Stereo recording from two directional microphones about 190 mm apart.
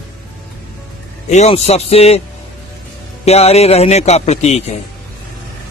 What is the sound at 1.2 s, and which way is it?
Speech, 35° left (ahead or behind).